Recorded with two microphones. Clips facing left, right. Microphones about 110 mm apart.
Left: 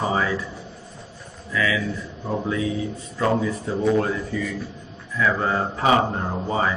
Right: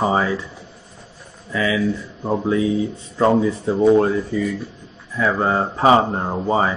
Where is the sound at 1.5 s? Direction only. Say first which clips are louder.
Right 4 dB; 25° right (ahead or behind).